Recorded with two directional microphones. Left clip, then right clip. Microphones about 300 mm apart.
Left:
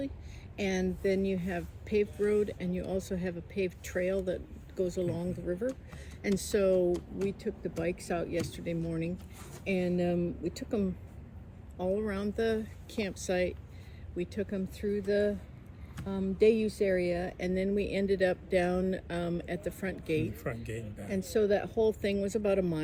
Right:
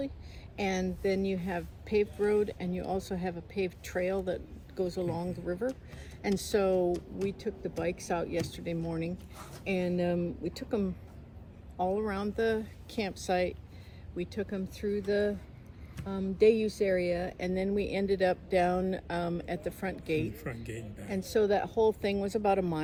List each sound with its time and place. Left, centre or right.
0.5 s a woman's voice: centre
20.7 s speech: centre
21.1 s a woman's voice: centre